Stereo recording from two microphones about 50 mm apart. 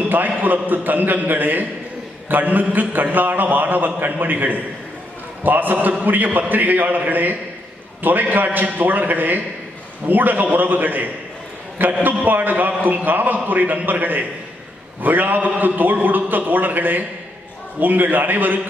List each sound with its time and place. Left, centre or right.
0.1 s a man's voice: right